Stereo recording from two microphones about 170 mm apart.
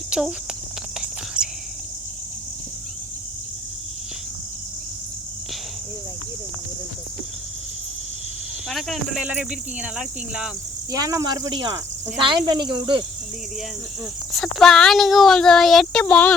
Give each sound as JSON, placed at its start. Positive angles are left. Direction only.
{"t": 0.1, "sound": "speech", "side_deg": -5}
{"t": 1.4, "sound": "cricket", "side_deg": -5}
{"t": 8.7, "sound": "speech", "side_deg": -5}
{"t": 10.9, "sound": "speech", "side_deg": -20}
{"t": 14.3, "sound": "speech", "side_deg": 0}